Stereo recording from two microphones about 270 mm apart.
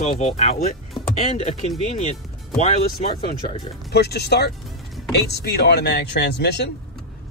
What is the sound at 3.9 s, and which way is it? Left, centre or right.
Speech, left.